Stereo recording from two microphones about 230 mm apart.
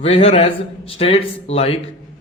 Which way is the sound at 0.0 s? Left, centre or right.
Left.